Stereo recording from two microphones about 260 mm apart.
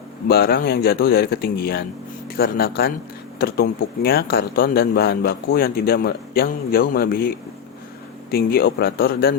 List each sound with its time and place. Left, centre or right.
0.3 s speech: left